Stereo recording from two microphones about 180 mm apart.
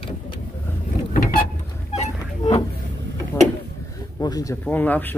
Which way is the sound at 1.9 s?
35° left (ahead or behind).